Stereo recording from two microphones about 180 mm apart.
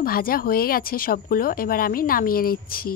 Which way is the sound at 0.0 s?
55° left (ahead or behind).